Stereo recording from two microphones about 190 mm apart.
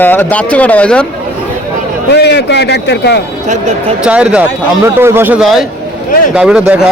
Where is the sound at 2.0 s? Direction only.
60° left (ahead or behind).